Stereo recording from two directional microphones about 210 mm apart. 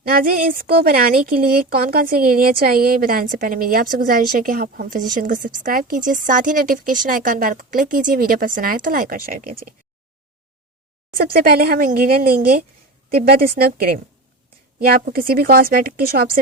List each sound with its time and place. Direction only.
0.2 s speech: 45° right (ahead or behind)
11.1 s speech: 45° right (ahead or behind)